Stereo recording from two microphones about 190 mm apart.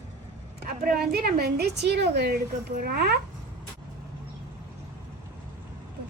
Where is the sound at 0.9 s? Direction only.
55° right (ahead or behind).